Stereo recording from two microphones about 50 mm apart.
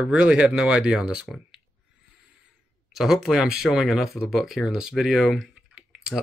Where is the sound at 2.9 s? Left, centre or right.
Centre.